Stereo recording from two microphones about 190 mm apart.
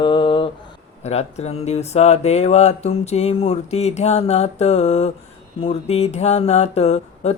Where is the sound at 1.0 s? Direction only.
35° left (ahead or behind).